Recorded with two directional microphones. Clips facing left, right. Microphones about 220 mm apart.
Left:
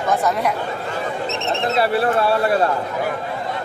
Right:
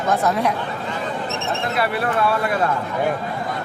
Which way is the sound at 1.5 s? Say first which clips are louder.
Left 4 dB; 25° left (ahead or behind).